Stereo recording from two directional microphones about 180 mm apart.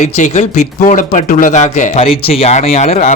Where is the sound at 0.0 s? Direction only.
40° left (ahead or behind).